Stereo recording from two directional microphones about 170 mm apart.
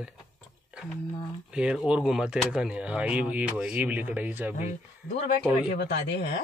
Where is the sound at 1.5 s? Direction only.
5° right (ahead or behind).